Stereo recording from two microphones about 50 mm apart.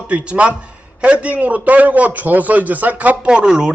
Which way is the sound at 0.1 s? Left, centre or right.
Right.